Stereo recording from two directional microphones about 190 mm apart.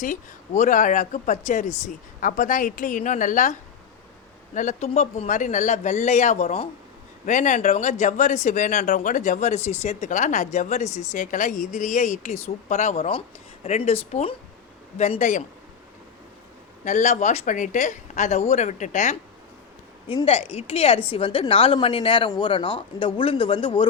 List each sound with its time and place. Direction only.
0.0 s a woman's voice: 40° left (ahead or behind)
4.5 s speech: 40° left (ahead or behind)
16.8 s speech: 40° left (ahead or behind)